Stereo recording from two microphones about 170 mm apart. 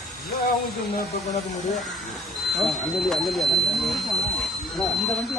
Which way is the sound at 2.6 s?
Centre (ahead or behind).